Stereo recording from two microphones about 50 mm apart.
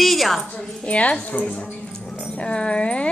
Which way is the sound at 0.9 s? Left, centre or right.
Left.